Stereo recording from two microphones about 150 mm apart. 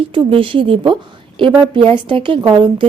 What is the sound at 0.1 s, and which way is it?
A woman's voice, 35° right (ahead or behind).